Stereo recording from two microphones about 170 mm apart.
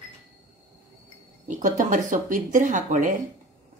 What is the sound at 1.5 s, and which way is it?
Speech, 45° right (ahead or behind).